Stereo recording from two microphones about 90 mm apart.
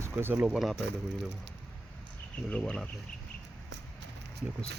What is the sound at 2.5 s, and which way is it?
Speech, 10° left (ahead or behind).